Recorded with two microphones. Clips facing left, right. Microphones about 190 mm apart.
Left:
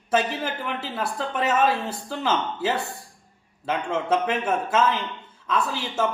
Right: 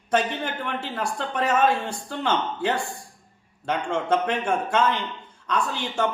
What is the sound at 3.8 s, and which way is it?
Speech, 5° left (ahead or behind).